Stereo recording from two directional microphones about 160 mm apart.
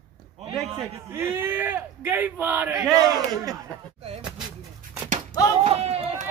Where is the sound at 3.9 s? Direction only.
40° right (ahead or behind).